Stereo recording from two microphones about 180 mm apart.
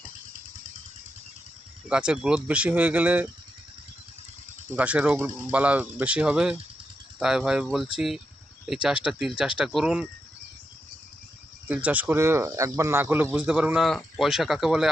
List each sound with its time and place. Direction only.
1.9 s speech: 5° right (ahead or behind)
4.7 s speech: 5° right (ahead or behind)
11.7 s speech: 10° right (ahead or behind)